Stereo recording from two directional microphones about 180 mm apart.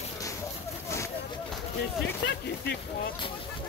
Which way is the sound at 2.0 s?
75° left (ahead or behind).